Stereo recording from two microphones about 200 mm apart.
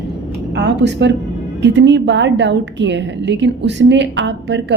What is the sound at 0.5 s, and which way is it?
A woman's voice, 60° right (ahead or behind).